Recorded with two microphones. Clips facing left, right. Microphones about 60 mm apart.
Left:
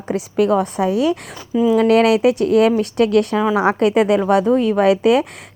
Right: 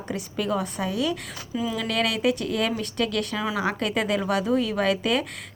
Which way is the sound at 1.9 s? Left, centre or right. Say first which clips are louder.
Left 11 dB; left.